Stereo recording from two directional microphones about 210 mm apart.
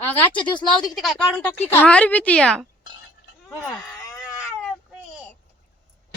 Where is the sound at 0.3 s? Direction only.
20° left (ahead or behind).